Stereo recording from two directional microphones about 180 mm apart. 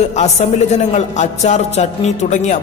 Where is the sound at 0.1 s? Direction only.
40° left (ahead or behind).